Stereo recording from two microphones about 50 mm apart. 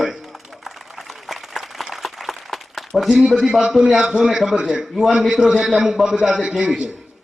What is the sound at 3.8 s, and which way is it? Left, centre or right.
A man's voice, centre.